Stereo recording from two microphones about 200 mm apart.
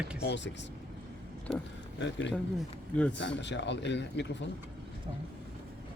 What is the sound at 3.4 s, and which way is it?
Speech, 60° left (ahead or behind).